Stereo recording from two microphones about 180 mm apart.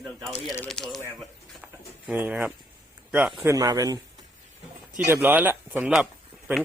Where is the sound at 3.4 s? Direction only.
20° right (ahead or behind).